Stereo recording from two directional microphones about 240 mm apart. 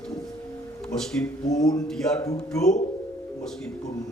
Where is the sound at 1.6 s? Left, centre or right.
Centre.